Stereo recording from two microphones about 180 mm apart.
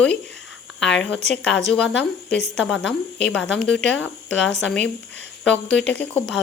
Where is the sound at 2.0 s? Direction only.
5° left (ahead or behind).